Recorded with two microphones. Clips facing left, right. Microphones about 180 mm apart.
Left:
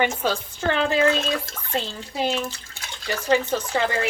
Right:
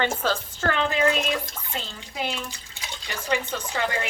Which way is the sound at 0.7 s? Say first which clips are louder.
Left 5 dB; 35° left (ahead or behind).